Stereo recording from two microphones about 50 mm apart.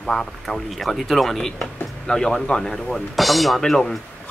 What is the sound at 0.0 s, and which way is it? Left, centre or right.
Speech, centre.